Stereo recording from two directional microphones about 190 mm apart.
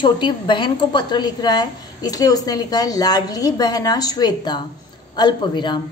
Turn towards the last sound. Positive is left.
turn(degrees=25)  # may be behind; listen again after turning